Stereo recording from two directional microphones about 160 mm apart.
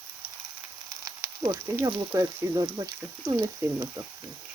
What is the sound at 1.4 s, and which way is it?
Speech, 20° right (ahead or behind).